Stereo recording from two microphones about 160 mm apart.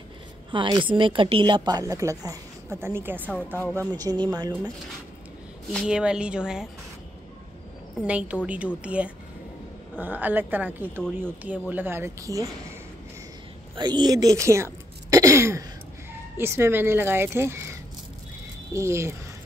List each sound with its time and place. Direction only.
0.5 s a woman's voice: 30° right (ahead or behind); by 3.3 s 15° right (ahead or behind)
3.9 s a woman's voice: 25° right (ahead or behind)
5.7 s speech: centre (ahead or behind)
8.0 s speech: 5° right (ahead or behind)
13.7 s speech: 30° right (ahead or behind)